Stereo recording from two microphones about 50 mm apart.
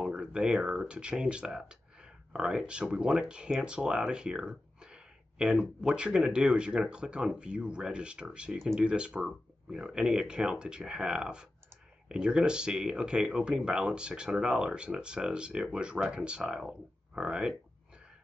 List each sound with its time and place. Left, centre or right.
0.0 s speech: centre